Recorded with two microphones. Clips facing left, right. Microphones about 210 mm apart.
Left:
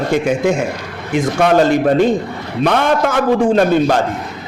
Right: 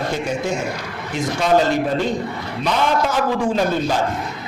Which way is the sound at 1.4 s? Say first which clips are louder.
Left 4 dB; 60° left (ahead or behind).